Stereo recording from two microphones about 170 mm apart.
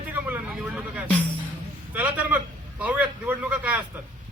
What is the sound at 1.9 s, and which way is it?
A man's voice, 10° right (ahead or behind).